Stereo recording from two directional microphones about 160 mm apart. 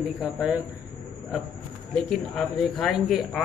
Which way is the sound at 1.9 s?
5° left (ahead or behind).